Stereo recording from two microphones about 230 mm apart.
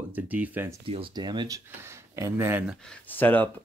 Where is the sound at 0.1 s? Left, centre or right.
Centre.